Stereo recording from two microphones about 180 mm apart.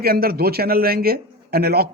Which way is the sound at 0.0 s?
55° right (ahead or behind).